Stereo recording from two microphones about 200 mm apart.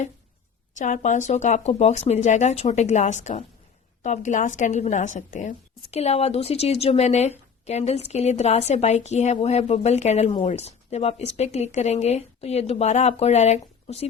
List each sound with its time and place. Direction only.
0.8 s a woman's voice: 35° left (ahead or behind)